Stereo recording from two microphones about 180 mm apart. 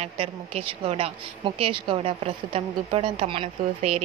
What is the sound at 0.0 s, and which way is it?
Speech, 35° right (ahead or behind).